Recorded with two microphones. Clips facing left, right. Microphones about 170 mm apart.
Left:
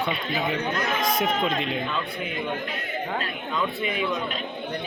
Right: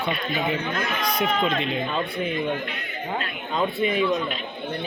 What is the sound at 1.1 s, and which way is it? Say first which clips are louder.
Speech: right 4 dB; 45° left (ahead or behind).